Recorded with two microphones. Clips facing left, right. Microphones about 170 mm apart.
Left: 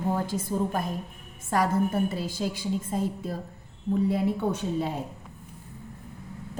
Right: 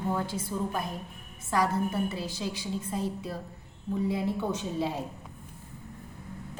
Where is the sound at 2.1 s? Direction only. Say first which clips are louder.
Left 4 dB; 50° left (ahead or behind).